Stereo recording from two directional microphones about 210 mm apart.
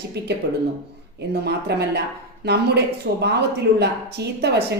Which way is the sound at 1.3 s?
50° right (ahead or behind).